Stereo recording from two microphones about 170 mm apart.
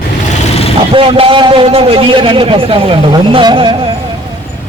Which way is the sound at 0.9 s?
30° right (ahead or behind).